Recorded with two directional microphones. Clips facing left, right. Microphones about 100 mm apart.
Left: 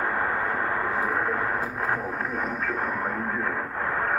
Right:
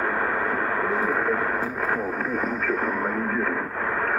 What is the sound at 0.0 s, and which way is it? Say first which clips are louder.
Radio: right 2 dB; 5° left (ahead or behind).